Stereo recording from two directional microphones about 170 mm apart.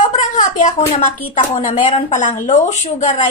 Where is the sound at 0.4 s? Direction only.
45° left (ahead or behind).